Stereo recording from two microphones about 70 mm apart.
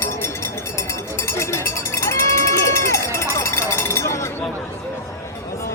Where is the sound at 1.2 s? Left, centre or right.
Left.